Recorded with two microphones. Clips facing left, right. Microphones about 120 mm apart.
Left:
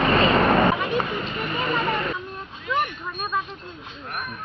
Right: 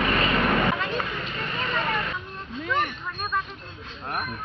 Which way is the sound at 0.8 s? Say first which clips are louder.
Left 4 dB; 15° left (ahead or behind).